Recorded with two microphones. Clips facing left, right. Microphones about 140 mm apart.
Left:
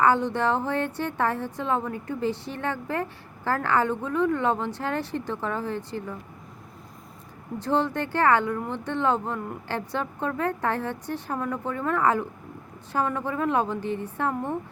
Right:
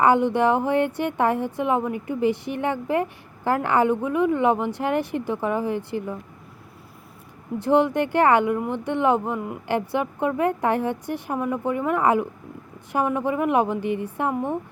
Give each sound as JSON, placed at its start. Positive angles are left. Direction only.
{"t": 0.0, "sound": "speech", "side_deg": -15}
{"t": 7.6, "sound": "speech", "side_deg": -15}